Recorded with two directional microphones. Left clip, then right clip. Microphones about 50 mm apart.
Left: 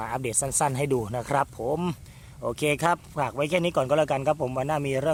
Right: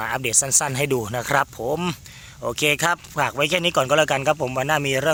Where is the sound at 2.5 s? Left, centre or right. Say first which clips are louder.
Right 4 dB; left.